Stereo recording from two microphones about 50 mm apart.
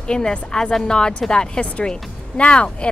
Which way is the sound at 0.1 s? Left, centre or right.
Centre.